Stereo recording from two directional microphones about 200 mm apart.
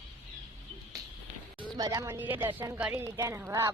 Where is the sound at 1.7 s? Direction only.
15° right (ahead or behind).